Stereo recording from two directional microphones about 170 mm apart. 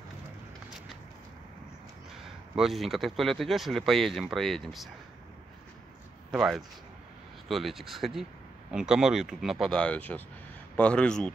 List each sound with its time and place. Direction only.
0.7 s a sound: centre (ahead or behind)
2.2 s speech: centre (ahead or behind)
6.3 s speech: centre (ahead or behind)